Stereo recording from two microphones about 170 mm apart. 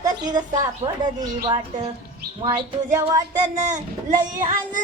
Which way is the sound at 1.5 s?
25° right (ahead or behind).